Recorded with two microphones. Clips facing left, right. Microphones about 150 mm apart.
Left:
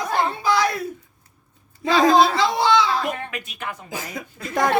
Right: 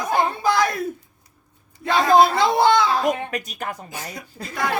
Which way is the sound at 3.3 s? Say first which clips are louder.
Right 3 dB; 40° right (ahead or behind).